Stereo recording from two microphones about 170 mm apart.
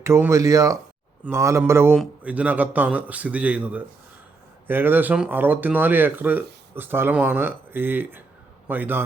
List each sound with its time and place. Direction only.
0.0 s a man's voice: 15° right (ahead or behind)